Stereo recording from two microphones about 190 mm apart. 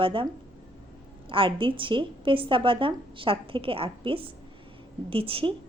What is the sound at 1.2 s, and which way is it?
A woman's voice, 25° right (ahead or behind).